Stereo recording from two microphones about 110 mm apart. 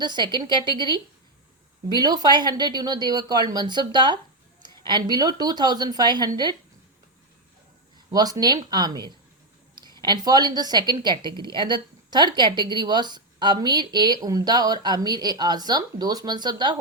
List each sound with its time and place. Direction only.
0.0 s a woman's voice: 45° right (ahead or behind)
8.1 s a woman's voice: 35° right (ahead or behind)